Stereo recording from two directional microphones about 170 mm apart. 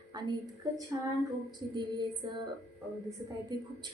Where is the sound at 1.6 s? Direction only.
25° right (ahead or behind).